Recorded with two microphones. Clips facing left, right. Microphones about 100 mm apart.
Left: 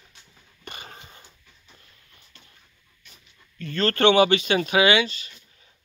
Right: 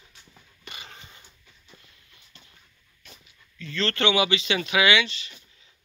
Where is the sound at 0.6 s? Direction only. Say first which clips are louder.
Left 3 dB; 40° left (ahead or behind).